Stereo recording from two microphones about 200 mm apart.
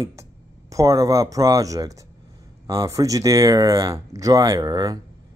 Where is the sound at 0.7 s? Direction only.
15° right (ahead or behind).